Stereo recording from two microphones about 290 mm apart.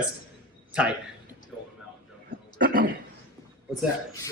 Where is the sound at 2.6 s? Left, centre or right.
Right.